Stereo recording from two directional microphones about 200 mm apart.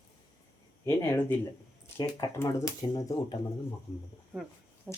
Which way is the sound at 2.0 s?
15° left (ahead or behind).